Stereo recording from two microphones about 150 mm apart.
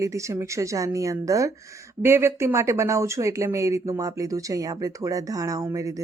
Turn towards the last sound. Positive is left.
turn(degrees=-20)  # may be behind; listen again after turning